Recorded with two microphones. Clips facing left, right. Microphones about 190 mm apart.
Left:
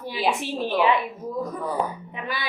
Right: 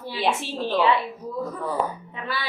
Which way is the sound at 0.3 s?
15° left (ahead or behind).